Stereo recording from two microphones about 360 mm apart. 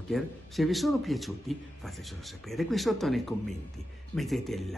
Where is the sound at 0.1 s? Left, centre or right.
Centre.